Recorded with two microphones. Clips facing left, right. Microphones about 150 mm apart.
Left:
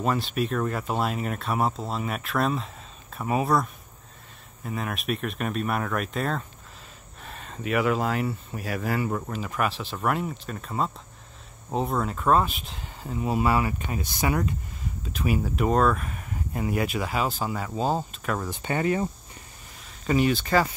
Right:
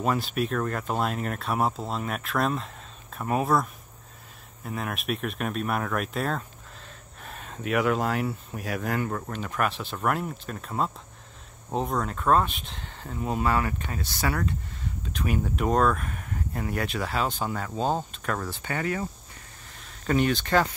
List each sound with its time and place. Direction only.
0.0 s speech: centre (ahead or behind); by 14.5 s 15° left (ahead or behind)
15.1 s speech: 5° left (ahead or behind)
18.5 s cricket: 20° left (ahead or behind)
19.8 s speech: 5° left (ahead or behind)